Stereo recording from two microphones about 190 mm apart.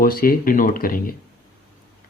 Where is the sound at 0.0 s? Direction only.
50° left (ahead or behind).